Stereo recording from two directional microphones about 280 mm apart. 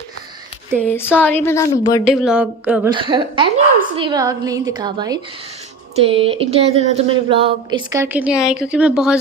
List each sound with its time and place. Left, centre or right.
0.8 s speech: centre
2.0 s a woman's voice: centre
2.9 s a woman's voice: centre
6.0 s a sound: centre
8.6 s a woman's voice: centre